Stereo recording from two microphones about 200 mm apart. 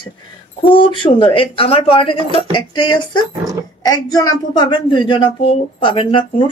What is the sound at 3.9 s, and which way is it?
Speech, 20° left (ahead or behind).